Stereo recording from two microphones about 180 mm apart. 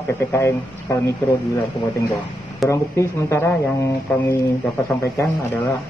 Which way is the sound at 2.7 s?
15° left (ahead or behind).